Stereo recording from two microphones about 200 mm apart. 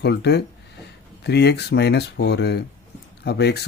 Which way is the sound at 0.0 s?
55° left (ahead or behind).